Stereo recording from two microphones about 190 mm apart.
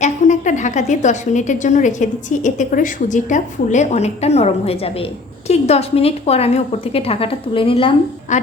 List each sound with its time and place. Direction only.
0.0 s a woman's voice: 40° left (ahead or behind)